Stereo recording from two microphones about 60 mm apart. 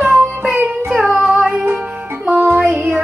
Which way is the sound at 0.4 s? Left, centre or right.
Right.